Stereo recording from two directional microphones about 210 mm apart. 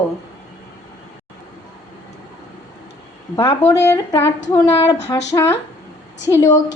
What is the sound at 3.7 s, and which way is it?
A woman's voice, 15° left (ahead or behind).